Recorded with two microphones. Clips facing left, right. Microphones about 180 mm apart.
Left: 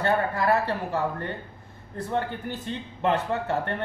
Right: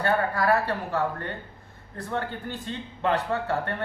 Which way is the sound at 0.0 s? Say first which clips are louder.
Even; 20° left (ahead or behind).